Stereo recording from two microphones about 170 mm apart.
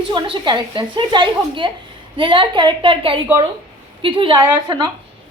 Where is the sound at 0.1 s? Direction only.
25° right (ahead or behind).